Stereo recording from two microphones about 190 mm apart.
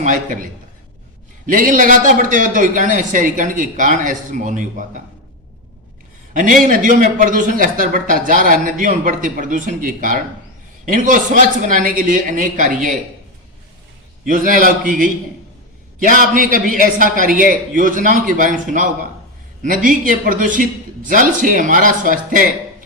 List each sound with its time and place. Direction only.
0.0 s a man's voice: 40° right (ahead or behind)
1.5 s a man's voice: 45° right (ahead or behind)
6.3 s a man's voice: 45° right (ahead or behind)
14.3 s a man's voice: 45° right (ahead or behind)
19.6 s a man's voice: 45° right (ahead or behind)